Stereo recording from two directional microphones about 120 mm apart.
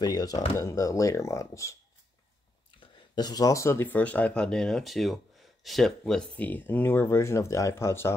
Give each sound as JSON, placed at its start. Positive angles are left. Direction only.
{"t": 0.0, "sound": "speech", "side_deg": 35}
{"t": 2.8, "sound": "speech", "side_deg": 35}